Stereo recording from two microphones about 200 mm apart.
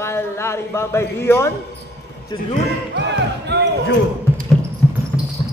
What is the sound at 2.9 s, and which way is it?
Music, 60° right (ahead or behind).